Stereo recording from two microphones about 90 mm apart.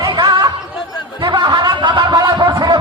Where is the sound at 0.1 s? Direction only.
55° right (ahead or behind).